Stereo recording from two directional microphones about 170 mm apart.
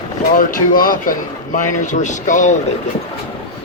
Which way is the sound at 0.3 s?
55° left (ahead or behind).